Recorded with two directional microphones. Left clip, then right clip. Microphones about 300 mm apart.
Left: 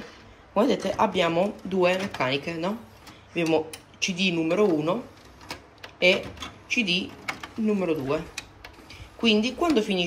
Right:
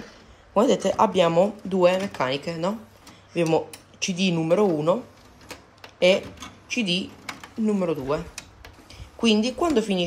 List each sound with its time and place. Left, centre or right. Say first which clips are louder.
0.6 s speech: right 3 dB; centre
5.9 s speech: right 2 dB; centre